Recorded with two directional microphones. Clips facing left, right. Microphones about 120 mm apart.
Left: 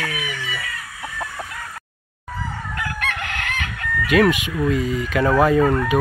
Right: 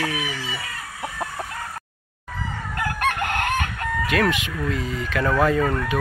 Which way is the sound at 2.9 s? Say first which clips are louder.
Right 6 dB; 45° right (ahead or behind).